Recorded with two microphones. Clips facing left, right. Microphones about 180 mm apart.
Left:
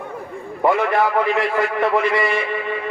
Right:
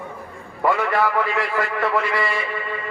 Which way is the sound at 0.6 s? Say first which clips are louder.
Left 3 dB; 20° left (ahead or behind).